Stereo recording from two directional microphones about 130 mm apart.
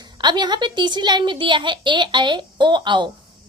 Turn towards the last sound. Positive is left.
turn(degrees=-35)  # may be behind; listen again after turning